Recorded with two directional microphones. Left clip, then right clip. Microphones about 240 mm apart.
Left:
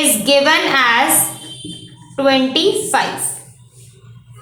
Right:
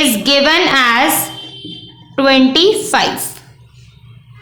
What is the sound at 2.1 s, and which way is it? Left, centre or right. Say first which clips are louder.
Speech: right 4 dB; right.